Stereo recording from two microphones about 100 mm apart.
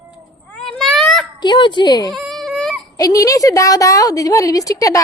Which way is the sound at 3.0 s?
35° left (ahead or behind).